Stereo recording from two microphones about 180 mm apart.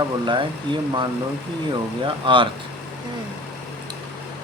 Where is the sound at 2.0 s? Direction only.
30° right (ahead or behind).